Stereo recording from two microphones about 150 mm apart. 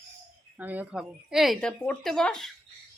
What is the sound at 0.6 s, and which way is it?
Speech, 10° right (ahead or behind).